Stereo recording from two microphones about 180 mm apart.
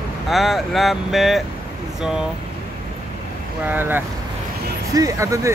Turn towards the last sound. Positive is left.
turn(degrees=-15)  # may be behind; listen again after turning